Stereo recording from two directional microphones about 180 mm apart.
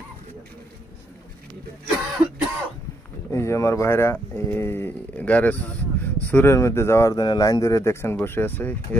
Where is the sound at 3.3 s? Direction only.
15° left (ahead or behind).